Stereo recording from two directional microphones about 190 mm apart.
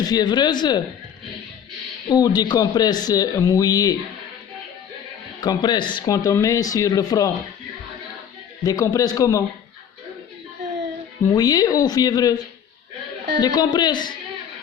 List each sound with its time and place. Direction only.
0.0 s speech: 20° left (ahead or behind)
2.0 s speech: 20° left (ahead or behind)
5.4 s speech: 20° left (ahead or behind)
8.6 s a man's voice: 20° left (ahead or behind)
11.3 s speech: 20° left (ahead or behind)
13.4 s speech: 20° left (ahead or behind)